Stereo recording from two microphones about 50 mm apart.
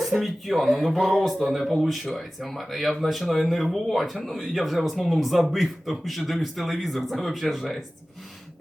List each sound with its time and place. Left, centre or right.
0.0 s speech: centre